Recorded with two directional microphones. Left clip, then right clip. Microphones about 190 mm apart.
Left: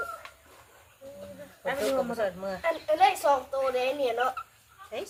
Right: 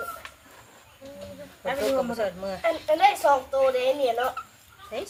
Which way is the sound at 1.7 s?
15° left (ahead or behind).